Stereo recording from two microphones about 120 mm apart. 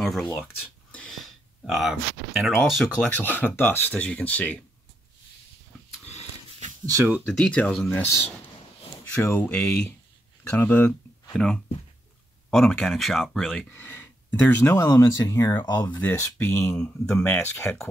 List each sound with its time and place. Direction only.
0.0 s speech: 5° left (ahead or behind)
3.0 s speech: 15° left (ahead or behind)
7.2 s speech: 5° left (ahead or behind)
7.9 s speech: 20° left (ahead or behind)
9.5 s speech: 5° left (ahead or behind)
10.5 s speech: 15° left (ahead or behind)
13.7 s speech: 15° left (ahead or behind)
14.8 s speech: 30° left (ahead or behind)
15.6 s speech: 35° left (ahead or behind)
15.9 s speech: 15° left (ahead or behind)
17.2 s speech: 20° left (ahead or behind)